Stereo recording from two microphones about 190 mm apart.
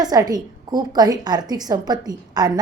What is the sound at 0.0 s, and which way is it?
A woman's voice, 20° right (ahead or behind).